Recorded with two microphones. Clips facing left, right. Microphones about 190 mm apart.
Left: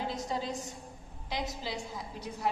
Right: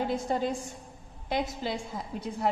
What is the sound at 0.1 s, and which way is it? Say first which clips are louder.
A woman's voice: right 6 dB; 55° right (ahead or behind).